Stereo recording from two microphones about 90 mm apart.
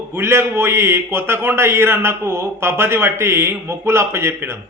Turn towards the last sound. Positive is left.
turn(degrees=-30)  # may be behind; listen again after turning